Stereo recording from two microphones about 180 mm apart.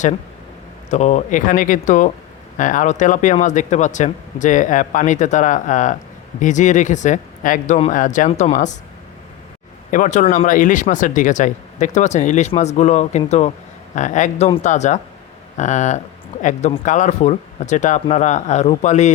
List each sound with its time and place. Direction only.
0.9 s speech: 40° left (ahead or behind)
9.9 s speech: 45° left (ahead or behind)